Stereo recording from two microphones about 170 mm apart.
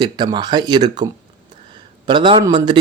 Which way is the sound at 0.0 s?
25° right (ahead or behind).